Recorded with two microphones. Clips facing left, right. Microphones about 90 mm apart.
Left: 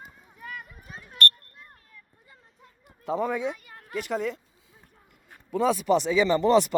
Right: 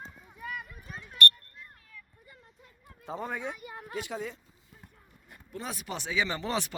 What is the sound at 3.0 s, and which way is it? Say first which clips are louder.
Speech: left 9 dB; 90° left.